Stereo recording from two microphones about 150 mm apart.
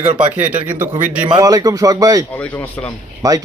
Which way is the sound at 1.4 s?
25° right (ahead or behind).